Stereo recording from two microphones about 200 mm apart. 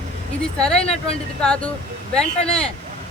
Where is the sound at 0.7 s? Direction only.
30° left (ahead or behind).